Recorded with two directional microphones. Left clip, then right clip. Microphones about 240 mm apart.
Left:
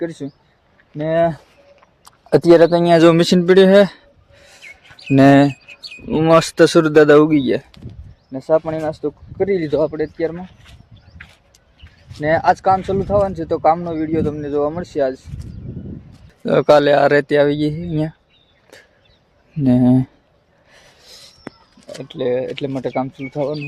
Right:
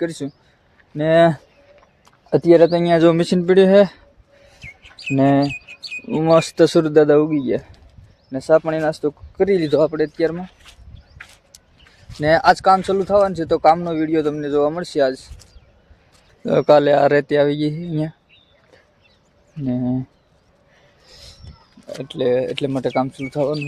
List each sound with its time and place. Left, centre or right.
0.0 s speech: centre
1.1 s speech: right
2.0 s speech: centre
5.0 s speech: left
6.1 s speech: centre
8.3 s speech: centre
11.2 s a sound: right
12.2 s speech: centre
19.6 s speech: left
21.8 s speech: centre